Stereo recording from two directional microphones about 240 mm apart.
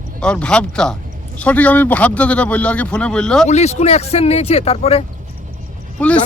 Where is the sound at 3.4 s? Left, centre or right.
Left.